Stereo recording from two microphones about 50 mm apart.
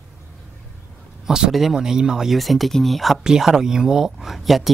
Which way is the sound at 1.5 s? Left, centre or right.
Centre.